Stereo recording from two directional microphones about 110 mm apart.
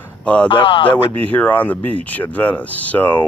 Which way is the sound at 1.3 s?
15° left (ahead or behind).